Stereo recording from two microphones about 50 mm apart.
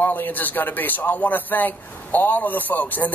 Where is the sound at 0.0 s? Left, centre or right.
Left.